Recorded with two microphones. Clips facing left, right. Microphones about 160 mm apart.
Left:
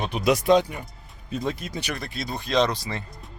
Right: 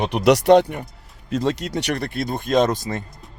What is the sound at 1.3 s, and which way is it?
Speech, 85° right.